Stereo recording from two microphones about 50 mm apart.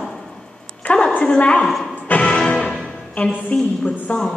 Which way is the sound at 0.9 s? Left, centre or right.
Left.